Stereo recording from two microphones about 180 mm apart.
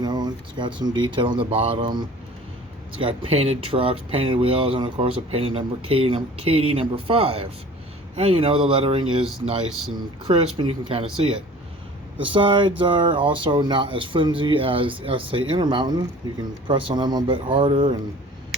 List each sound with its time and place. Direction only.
0.0 s a sound: 20° right (ahead or behind)
0.8 s speech: 25° right (ahead or behind)
10.2 s speech: 30° right (ahead or behind)